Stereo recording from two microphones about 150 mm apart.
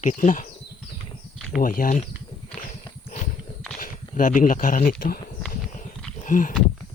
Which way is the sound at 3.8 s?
60° left (ahead or behind).